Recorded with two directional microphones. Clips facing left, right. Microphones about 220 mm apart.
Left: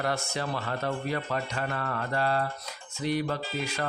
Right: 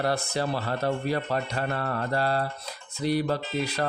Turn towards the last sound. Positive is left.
turn(degrees=-35)  # may be behind; listen again after turning